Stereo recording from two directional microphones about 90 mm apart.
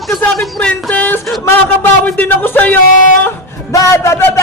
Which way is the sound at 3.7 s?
30° left (ahead or behind).